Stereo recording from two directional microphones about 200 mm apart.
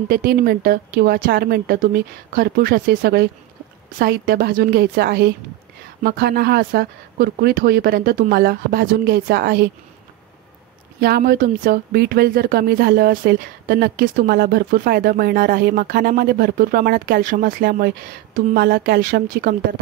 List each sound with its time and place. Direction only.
0.1 s speech: 50° right (ahead or behind)
11.0 s speech: 50° right (ahead or behind)